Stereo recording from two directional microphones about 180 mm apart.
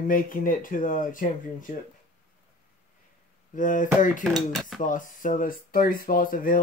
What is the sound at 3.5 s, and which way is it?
Speech, 45° left (ahead or behind).